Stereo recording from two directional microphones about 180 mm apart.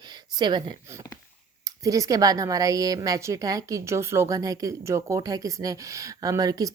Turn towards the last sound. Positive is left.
turn(degrees=-20)  # may be behind; listen again after turning